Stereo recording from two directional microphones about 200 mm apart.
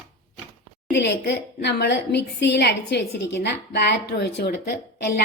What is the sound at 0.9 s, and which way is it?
A woman's voice, 60° left (ahead or behind).